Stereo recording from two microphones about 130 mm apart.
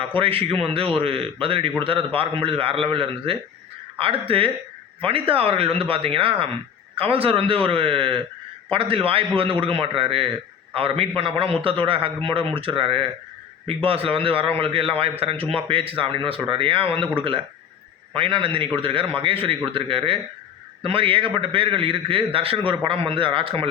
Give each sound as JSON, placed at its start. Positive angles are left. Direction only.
{"t": 0.2, "sound": "a man's voice", "side_deg": -45}